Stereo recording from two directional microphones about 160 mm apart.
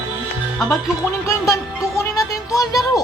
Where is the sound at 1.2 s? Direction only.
20° left (ahead or behind).